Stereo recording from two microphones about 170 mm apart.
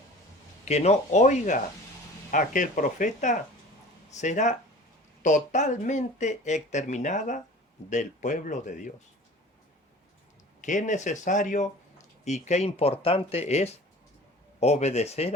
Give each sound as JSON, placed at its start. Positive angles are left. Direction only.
{"t": 0.6, "sound": "speech", "side_deg": 40}
{"t": 10.6, "sound": "speech", "side_deg": 45}